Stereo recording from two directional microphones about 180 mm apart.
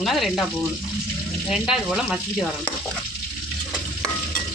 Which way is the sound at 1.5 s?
5° right (ahead or behind).